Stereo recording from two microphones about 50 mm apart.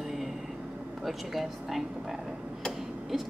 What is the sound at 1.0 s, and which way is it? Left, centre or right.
Speech, centre.